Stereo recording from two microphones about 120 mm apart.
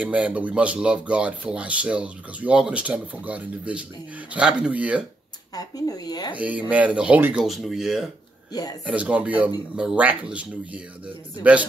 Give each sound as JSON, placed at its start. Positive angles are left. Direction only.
{"t": 0.0, "sound": "speech", "side_deg": -10}
{"t": 5.5, "sound": "a woman's voice", "side_deg": 30}
{"t": 6.3, "sound": "speech", "side_deg": -10}
{"t": 7.4, "sound": "speech", "side_deg": 0}